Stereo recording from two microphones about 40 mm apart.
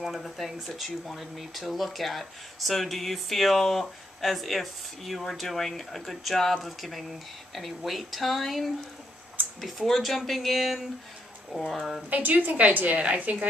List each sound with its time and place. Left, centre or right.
0.0 s speech: centre
12.1 s a woman's voice: right